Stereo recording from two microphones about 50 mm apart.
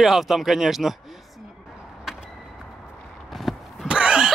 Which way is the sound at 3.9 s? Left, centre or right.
Centre.